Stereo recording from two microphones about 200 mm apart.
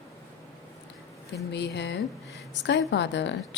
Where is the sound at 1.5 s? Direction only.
60° left (ahead or behind).